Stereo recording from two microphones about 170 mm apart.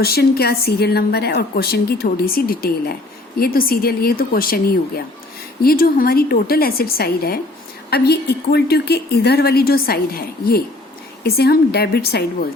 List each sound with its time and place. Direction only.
0.0 s a woman's voice: 65° left (ahead or behind)